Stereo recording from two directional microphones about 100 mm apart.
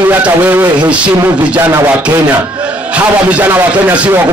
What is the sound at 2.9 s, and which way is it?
A man's voice, 15° right (ahead or behind).